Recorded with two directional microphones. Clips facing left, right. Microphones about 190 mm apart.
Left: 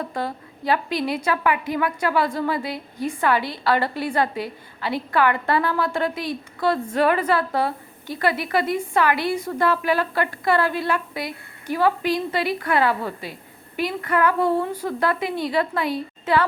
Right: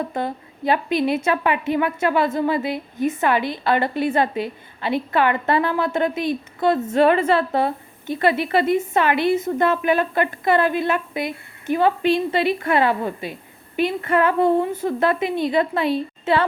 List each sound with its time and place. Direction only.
0.1 s a woman's voice: 20° right (ahead or behind)